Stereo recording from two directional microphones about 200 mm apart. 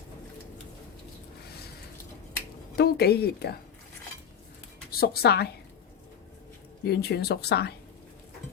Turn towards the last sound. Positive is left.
turn(degrees=55)  # may be behind; listen again after turning